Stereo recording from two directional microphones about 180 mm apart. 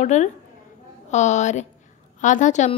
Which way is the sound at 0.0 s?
40° left (ahead or behind).